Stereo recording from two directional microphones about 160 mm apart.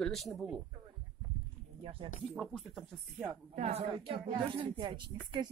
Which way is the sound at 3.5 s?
40° right (ahead or behind).